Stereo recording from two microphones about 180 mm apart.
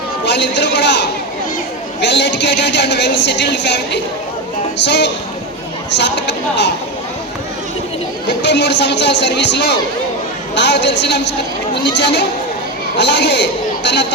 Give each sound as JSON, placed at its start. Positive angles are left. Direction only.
{"t": 0.3, "sound": "a woman's voice", "side_deg": 75}
{"t": 8.3, "sound": "a woman's voice", "side_deg": 75}